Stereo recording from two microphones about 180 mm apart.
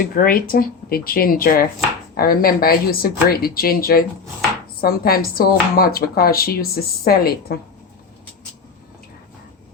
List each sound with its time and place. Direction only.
0.0 s speech: 55° left (ahead or behind)